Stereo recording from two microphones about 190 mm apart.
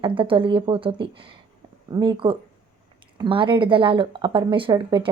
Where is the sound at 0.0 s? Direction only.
25° right (ahead or behind).